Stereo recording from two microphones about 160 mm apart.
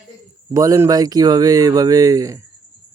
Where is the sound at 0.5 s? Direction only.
20° right (ahead or behind).